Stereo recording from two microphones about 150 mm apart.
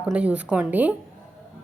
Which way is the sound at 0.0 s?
10° right (ahead or behind).